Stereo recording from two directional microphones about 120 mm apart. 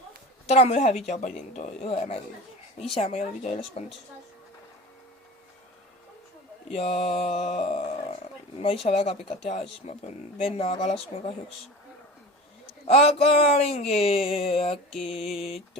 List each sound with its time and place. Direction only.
0.4 s a woman's voice: 60° left (ahead or behind)
6.7 s a woman's voice: 55° left (ahead or behind)
12.9 s speech: 60° left (ahead or behind)